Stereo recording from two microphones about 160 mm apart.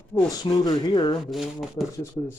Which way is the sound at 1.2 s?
Centre (ahead or behind).